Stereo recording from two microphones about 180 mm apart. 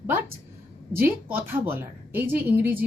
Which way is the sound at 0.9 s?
10° right (ahead or behind).